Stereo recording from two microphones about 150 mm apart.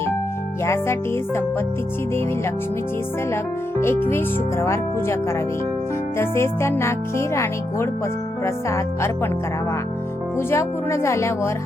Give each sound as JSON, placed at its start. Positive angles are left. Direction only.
{"t": 0.6, "sound": "speech", "side_deg": 20}
{"t": 3.8, "sound": "speech", "side_deg": 15}
{"t": 6.1, "sound": "speech", "side_deg": 15}
{"t": 10.3, "sound": "speech", "side_deg": 20}